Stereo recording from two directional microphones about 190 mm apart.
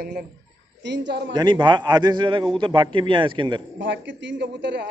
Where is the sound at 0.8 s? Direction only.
70° right (ahead or behind).